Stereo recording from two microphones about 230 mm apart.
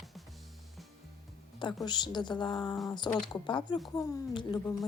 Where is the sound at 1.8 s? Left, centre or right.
Centre.